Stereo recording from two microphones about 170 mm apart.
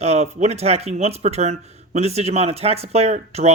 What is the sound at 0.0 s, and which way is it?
Speech, 40° right (ahead or behind).